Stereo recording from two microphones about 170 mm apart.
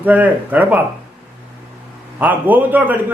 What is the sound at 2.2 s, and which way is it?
Speech, 10° right (ahead or behind).